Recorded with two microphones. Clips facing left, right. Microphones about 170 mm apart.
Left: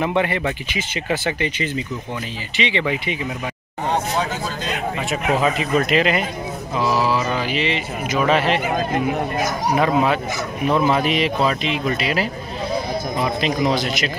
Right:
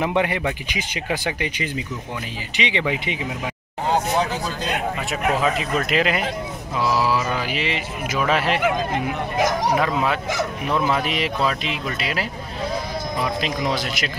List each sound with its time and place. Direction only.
0.0 s speech: 10° right (ahead or behind)
5.4 s speech: centre (ahead or behind)
9.8 s speech: centre (ahead or behind)